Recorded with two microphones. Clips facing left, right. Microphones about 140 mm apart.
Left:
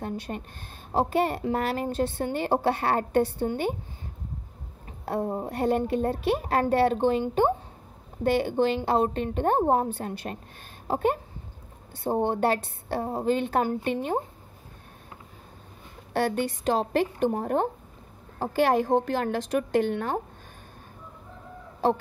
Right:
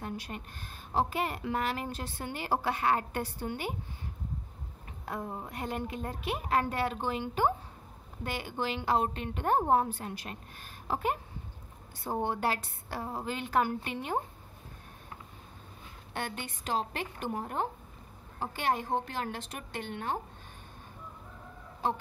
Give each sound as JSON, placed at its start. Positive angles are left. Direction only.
{"t": 0.0, "sound": "speech", "side_deg": 35}
{"t": 5.0, "sound": "speech", "side_deg": 35}
{"t": 16.1, "sound": "speech", "side_deg": 35}
{"t": 18.7, "sound": "a woman's voice", "side_deg": 90}
{"t": 19.0, "sound": "a woman's voice", "side_deg": 45}